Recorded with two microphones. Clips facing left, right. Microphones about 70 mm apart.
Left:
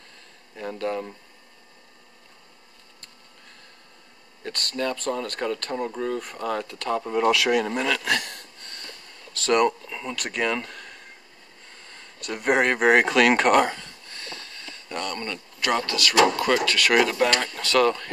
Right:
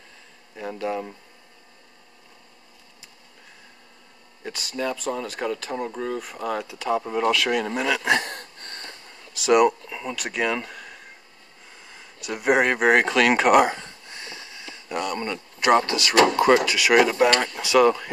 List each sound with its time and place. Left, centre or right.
0.6 s speech: centre
4.4 s speech: centre
8.0 s speech: right
8.3 s a sound: right
9.3 s speech: centre
16.7 s speech: centre